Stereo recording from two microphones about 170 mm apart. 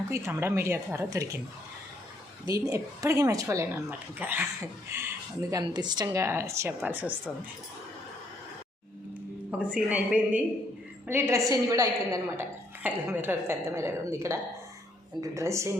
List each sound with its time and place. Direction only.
0.1 s speech: 15° right (ahead or behind)
2.5 s speech: 20° right (ahead or behind)
9.5 s speech: 5° right (ahead or behind)